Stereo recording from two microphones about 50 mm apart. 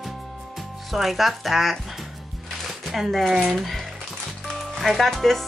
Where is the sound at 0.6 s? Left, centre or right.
Centre.